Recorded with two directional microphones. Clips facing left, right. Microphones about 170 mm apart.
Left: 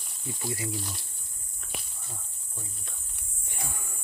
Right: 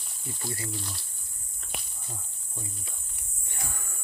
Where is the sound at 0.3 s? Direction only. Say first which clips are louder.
Left 3 dB; 15° left (ahead or behind).